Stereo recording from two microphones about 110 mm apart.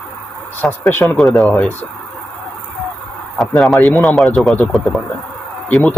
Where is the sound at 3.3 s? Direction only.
Centre (ahead or behind).